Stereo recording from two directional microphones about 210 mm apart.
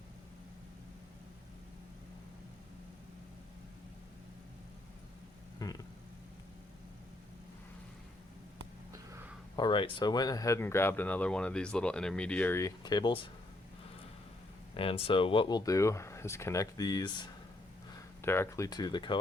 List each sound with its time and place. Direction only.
5.5 s vehicle: 15° left (ahead or behind)
9.6 s speech: 25° left (ahead or behind)
14.8 s speech: 25° left (ahead or behind)
18.2 s speech: 10° left (ahead or behind)